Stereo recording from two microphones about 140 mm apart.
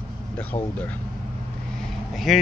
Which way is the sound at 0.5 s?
35° left (ahead or behind).